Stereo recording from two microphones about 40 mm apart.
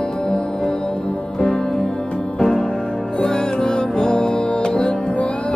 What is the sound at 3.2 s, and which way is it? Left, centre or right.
Music, centre.